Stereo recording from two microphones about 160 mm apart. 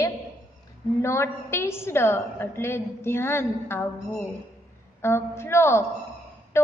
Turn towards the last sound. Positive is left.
turn(degrees=15)  # may be behind; listen again after turning